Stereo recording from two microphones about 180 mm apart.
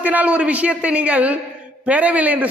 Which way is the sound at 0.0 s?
10° right (ahead or behind).